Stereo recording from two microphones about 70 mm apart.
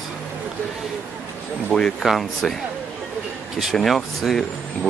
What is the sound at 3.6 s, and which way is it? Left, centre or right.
Speech, centre.